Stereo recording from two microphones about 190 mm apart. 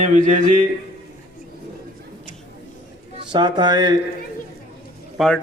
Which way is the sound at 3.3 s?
25° right (ahead or behind).